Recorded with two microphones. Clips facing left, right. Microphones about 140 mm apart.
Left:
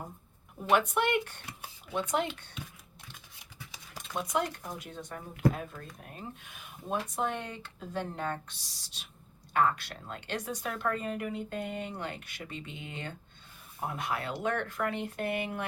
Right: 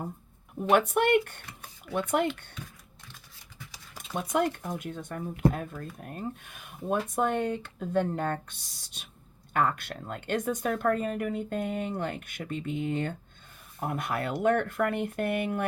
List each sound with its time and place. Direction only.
0.7 s a woman's voice: 50° right (ahead or behind)
4.3 s a woman's voice: 50° right (ahead or behind)